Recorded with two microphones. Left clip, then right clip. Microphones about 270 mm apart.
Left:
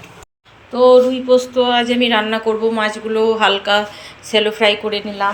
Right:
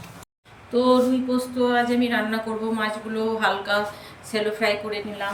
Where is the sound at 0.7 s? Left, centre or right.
Centre.